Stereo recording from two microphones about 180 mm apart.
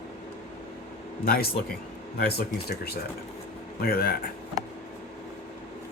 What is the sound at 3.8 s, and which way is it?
Speech, 55° left (ahead or behind).